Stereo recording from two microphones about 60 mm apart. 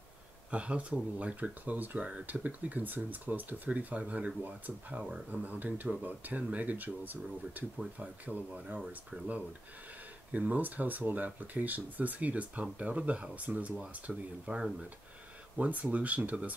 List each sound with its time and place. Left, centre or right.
0.5 s speech: centre
10.3 s speech: right
15.5 s speech: right